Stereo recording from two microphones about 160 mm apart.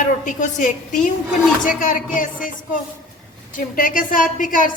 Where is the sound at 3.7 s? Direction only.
60° left (ahead or behind).